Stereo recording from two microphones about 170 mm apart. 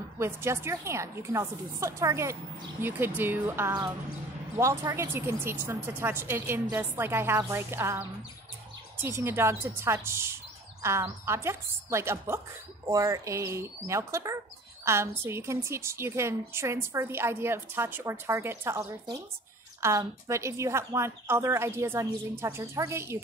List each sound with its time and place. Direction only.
0.2 s speech: 15° right (ahead or behind)
9.0 s speech: 15° right (ahead or behind)